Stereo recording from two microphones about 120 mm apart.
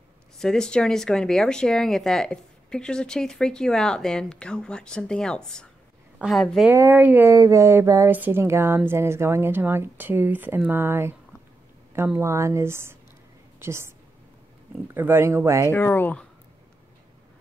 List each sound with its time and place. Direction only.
0.4 s speech: 5° left (ahead or behind)
6.1 s a woman's voice: 5° right (ahead or behind)
6.7 s speech: 20° right (ahead or behind)
7.3 s a woman's voice: 25° right (ahead or behind)
12.2 s a woman's voice: 25° right (ahead or behind)
15.0 s a woman's voice: 20° right (ahead or behind)
15.7 s speech: 20° left (ahead or behind)